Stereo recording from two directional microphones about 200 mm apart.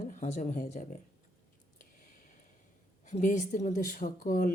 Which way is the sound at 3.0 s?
35° left (ahead or behind).